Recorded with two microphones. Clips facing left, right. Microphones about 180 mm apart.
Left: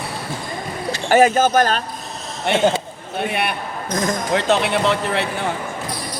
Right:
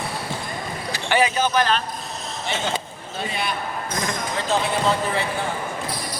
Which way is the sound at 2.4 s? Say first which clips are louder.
Left 10 dB; 60° left (ahead or behind).